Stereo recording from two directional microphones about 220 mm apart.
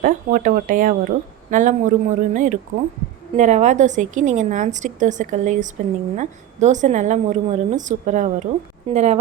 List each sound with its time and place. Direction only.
0.0 s speech: 35° right (ahead or behind)